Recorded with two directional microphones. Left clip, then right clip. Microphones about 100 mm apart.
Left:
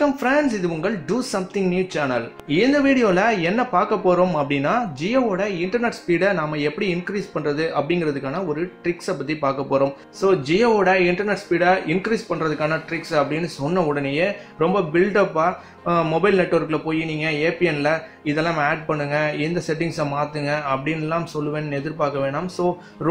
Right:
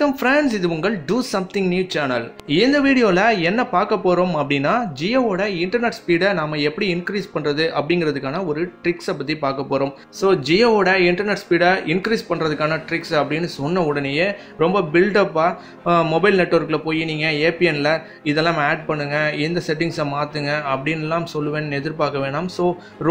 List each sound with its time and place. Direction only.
0.0 s speech: 25° right (ahead or behind)
4.5 s a man's voice: 25° right (ahead or behind)
10.2 s a man's voice: 25° right (ahead or behind)